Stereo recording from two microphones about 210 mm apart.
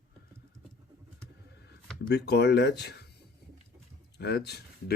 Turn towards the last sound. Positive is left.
turn(degrees=50)  # may be behind; listen again after turning